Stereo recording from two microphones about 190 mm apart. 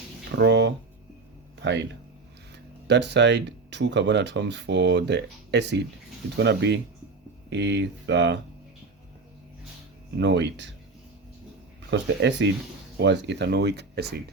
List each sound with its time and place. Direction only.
0.3 s a sound: 65° right (ahead or behind)
1.6 s speech: 65° right (ahead or behind)
10.2 s speech: 65° right (ahead or behind)
11.9 s speech: 70° right (ahead or behind)